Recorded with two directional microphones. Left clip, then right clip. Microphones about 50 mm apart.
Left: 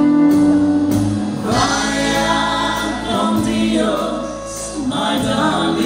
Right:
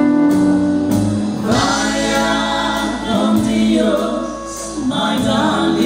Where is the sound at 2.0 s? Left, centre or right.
Right.